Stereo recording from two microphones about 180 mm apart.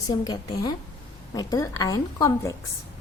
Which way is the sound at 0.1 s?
20° left (ahead or behind).